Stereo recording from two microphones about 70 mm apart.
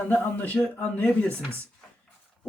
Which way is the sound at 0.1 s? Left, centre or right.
Left.